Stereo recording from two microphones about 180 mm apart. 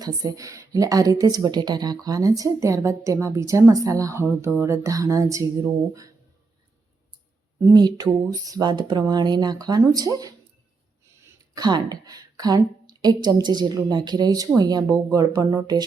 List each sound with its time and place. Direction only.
0.0 s a woman's voice: 20° right (ahead or behind)
7.6 s a woman's voice: 20° right (ahead or behind)
11.5 s a woman's voice: 20° right (ahead or behind)